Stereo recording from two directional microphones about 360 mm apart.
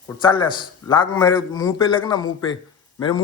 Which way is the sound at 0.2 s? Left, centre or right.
Centre.